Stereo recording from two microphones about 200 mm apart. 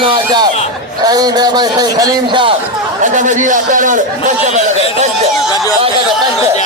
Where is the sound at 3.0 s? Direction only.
40° right (ahead or behind).